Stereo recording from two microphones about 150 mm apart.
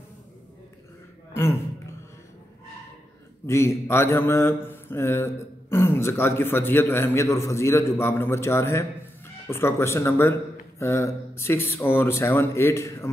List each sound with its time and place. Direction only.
3.4 s speech: 20° left (ahead or behind)